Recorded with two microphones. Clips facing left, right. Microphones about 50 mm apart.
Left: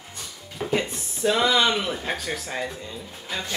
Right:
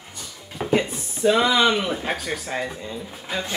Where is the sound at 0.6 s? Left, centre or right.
Centre.